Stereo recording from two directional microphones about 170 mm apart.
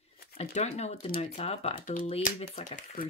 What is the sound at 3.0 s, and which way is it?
Speech, 60° left (ahead or behind).